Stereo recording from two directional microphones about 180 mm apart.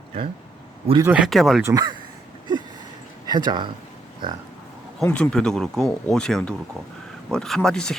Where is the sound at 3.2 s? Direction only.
25° right (ahead or behind).